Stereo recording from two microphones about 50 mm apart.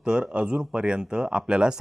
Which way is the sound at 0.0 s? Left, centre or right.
Centre.